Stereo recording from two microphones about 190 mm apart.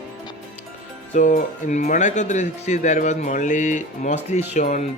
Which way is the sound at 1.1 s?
45° left (ahead or behind).